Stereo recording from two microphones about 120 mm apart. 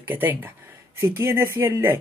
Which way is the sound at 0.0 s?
15° right (ahead or behind).